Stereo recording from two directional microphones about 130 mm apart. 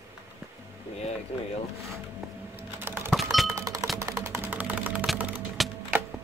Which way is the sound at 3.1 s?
Centre (ahead or behind).